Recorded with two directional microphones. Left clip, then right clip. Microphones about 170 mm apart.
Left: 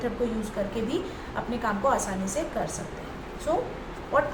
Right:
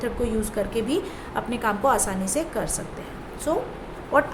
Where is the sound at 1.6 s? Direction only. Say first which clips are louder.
Right 4 dB; 90° right.